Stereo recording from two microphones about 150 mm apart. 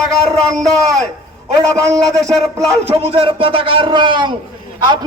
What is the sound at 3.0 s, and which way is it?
A man's voice, 40° right (ahead or behind).